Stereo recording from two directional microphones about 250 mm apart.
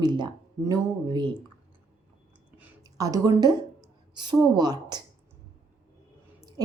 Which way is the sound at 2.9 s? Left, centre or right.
Centre.